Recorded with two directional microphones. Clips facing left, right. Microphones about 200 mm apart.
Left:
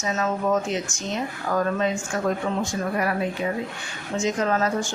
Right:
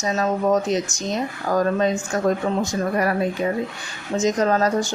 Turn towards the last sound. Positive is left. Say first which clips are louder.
# right 4 dB
turn(degrees=-35)  # may be behind; listen again after turning